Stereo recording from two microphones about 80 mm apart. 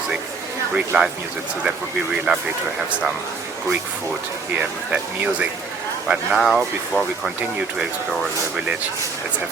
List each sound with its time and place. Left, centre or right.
0.8 s speech: centre
2.3 s speech: centre
4.5 s speech: centre
6.1 s speech: centre